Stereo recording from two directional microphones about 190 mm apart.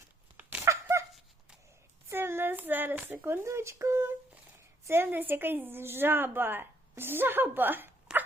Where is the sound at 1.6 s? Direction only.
15° right (ahead or behind).